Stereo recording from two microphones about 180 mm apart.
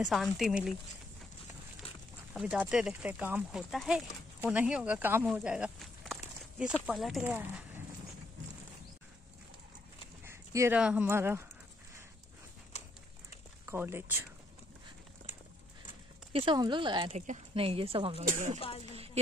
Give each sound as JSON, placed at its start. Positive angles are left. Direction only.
{"t": 0.0, "sound": "speech", "side_deg": 0}
{"t": 2.3, "sound": "speech", "side_deg": -10}
{"t": 10.2, "sound": "speech", "side_deg": -15}
{"t": 12.7, "sound": "clip-clop", "side_deg": 40}
{"t": 13.7, "sound": "speech", "side_deg": -15}
{"t": 16.3, "sound": "a woman's voice", "side_deg": -25}
{"t": 18.6, "sound": "speech", "side_deg": 35}